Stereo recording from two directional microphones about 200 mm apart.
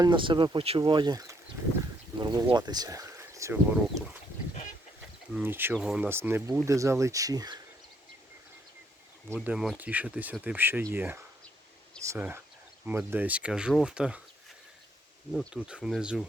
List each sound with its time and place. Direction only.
0.0 s speech: 25° right (ahead or behind)
5.3 s speech: 10° right (ahead or behind)
9.3 s speech: 5° right (ahead or behind)
15.3 s speech: centre (ahead or behind)